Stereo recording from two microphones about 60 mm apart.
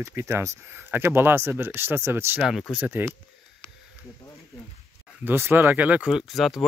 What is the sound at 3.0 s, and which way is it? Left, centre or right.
Speech, right.